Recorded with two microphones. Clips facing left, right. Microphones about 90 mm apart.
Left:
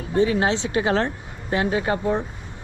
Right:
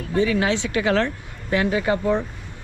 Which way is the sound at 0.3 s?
25° left (ahead or behind).